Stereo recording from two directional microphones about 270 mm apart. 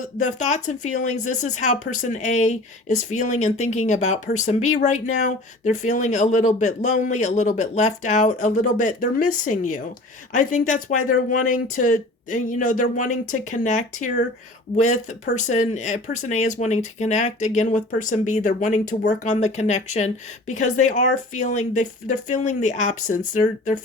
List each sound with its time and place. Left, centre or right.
0.2 s speech: left